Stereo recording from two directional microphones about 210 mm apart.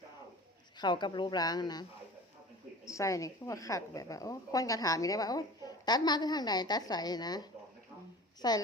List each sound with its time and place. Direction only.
0.8 s speech: 20° left (ahead or behind)
2.8 s a woman's voice: 15° left (ahead or behind)